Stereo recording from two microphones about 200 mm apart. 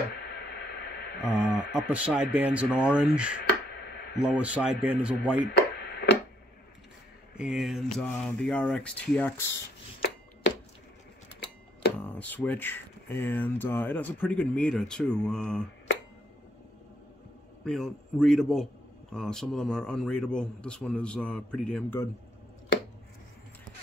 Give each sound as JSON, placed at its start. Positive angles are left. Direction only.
{"t": 0.1, "sound": "radio", "side_deg": 55}
{"t": 1.9, "sound": "a man's voice", "side_deg": -5}
{"t": 3.7, "sound": "a sound", "side_deg": 55}
{"t": 4.2, "sound": "a man's voice", "side_deg": -5}
{"t": 5.5, "sound": "a sound", "side_deg": 55}
{"t": 7.3, "sound": "a man's voice", "side_deg": 0}
{"t": 12.0, "sound": "speech", "side_deg": 10}
{"t": 17.6, "sound": "a man's voice", "side_deg": 0}